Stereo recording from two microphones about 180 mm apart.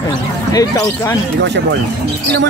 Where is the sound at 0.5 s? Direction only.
20° left (ahead or behind).